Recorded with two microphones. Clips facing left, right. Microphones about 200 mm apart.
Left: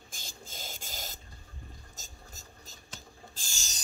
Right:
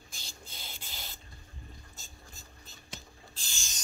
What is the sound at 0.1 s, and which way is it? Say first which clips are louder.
Printer: left 3 dB; 45° left (ahead or behind).